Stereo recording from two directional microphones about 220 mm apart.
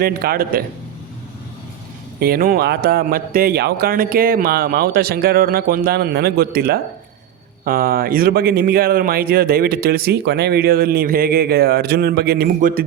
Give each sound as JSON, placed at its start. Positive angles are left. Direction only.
{"t": 0.0, "sound": "a man's voice", "side_deg": -45}
{"t": 2.1, "sound": "a man's voice", "side_deg": -45}